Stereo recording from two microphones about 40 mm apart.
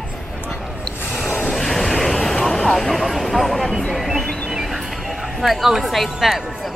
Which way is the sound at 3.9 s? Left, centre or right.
Centre.